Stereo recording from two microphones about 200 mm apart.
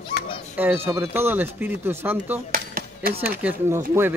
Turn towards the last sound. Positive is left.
turn(degrees=-10)  # may be behind; listen again after turning